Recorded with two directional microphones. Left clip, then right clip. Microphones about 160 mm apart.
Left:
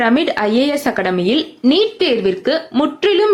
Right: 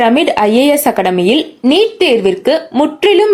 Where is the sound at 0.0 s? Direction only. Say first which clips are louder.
Right 5 dB; 15° right (ahead or behind).